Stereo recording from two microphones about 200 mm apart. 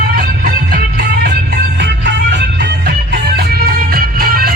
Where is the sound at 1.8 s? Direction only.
60° right (ahead or behind).